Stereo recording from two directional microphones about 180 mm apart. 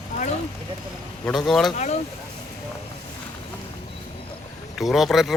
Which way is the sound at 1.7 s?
40° left (ahead or behind).